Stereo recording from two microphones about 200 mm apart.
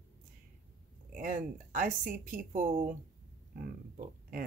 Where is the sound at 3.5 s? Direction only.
45° right (ahead or behind).